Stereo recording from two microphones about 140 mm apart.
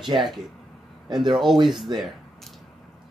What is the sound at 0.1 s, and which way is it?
Speech, 30° right (ahead or behind).